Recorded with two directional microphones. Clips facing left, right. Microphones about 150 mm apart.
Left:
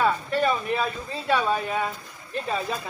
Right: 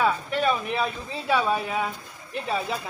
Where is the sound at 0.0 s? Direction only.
5° right (ahead or behind).